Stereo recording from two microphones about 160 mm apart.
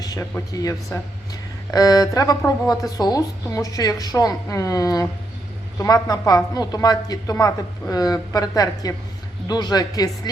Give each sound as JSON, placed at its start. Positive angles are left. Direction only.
{"t": 0.0, "sound": "a woman's voice", "side_deg": 20}